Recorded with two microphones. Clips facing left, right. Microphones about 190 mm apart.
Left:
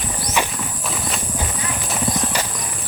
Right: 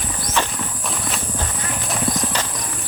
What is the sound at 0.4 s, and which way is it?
Horse, 15° left (ahead or behind).